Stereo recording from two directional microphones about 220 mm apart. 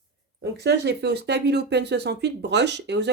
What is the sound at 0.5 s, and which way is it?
Speech, 50° right (ahead or behind).